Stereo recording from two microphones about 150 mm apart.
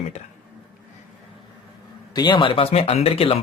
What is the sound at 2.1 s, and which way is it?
Speech, 30° left (ahead or behind).